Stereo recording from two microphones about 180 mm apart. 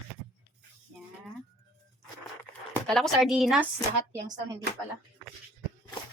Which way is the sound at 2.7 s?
5° left (ahead or behind).